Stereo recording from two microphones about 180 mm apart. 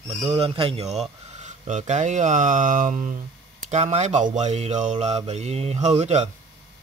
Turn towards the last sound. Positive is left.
turn(degrees=-40)  # may be behind; listen again after turning